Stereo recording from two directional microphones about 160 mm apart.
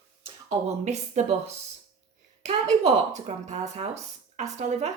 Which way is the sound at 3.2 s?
45° right (ahead or behind).